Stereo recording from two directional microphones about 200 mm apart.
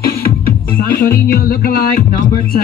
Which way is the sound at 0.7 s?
45° left (ahead or behind).